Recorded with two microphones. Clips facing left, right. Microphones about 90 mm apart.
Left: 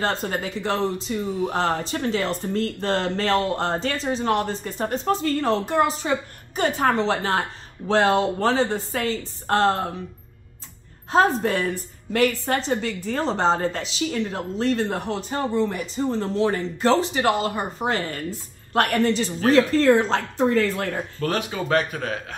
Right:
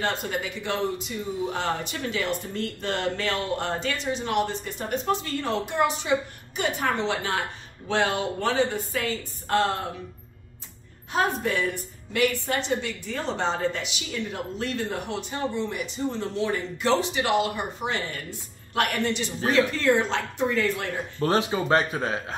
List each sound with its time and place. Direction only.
0.0 s speech: 35° left (ahead or behind)
11.1 s speech: 35° left (ahead or behind)
21.2 s speech: 30° right (ahead or behind)